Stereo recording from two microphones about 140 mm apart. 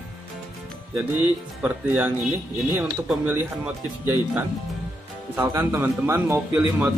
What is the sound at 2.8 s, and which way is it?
A man's voice, 10° right (ahead or behind).